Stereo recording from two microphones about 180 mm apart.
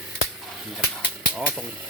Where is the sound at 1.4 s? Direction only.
5° right (ahead or behind).